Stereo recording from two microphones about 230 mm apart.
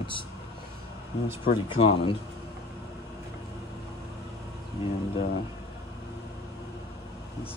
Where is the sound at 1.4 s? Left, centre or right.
Left.